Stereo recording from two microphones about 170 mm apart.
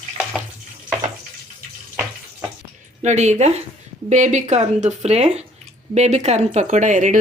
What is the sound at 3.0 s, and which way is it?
Speech, 40° right (ahead or behind).